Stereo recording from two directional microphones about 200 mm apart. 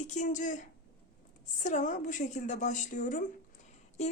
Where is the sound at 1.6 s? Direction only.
40° left (ahead or behind).